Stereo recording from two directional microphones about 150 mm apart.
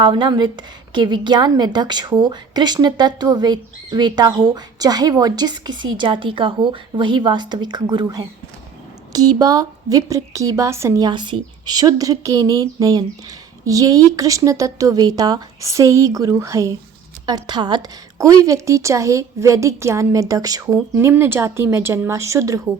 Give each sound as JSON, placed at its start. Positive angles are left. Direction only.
{"t": 0.0, "sound": "a woman's voice", "side_deg": -30}